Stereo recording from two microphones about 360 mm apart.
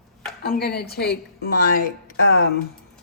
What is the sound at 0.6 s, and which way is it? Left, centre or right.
Speech, left.